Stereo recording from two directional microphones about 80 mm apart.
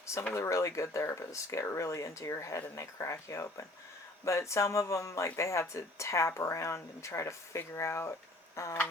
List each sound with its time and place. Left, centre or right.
0.3 s speech: left
8.5 s tick-tock: left